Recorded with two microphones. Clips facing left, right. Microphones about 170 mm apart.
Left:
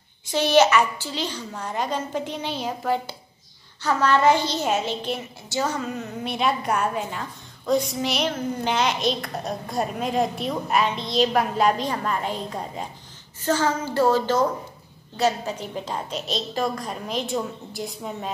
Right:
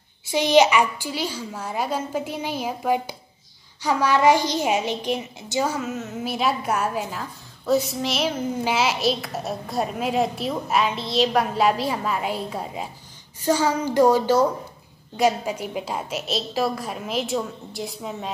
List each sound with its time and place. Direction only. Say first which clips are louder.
0.3 s a woman's voice: right 1 dB; 15° right (ahead or behind)